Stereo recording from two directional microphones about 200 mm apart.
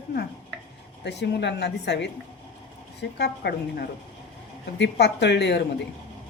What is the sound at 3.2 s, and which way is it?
A woman's voice, 55° left (ahead or behind).